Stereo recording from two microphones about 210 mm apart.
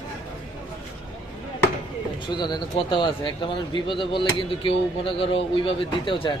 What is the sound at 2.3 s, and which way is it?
Speech, 20° left (ahead or behind).